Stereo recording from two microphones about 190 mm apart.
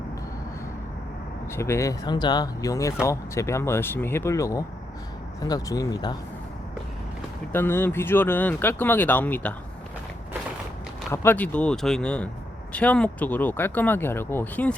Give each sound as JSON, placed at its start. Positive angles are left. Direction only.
{"t": 1.5, "sound": "speech", "side_deg": 15}
{"t": 7.5, "sound": "speech", "side_deg": 10}
{"t": 11.1, "sound": "speech", "side_deg": 10}